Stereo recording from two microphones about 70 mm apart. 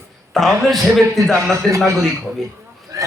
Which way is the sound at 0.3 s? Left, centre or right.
Centre.